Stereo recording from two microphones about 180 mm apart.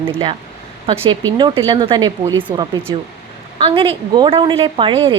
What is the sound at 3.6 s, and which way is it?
A woman's voice, 30° right (ahead or behind).